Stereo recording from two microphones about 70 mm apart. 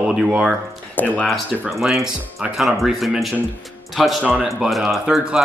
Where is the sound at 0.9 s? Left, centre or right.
Left.